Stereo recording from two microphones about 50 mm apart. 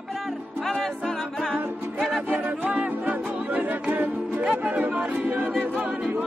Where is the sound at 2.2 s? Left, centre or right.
Right.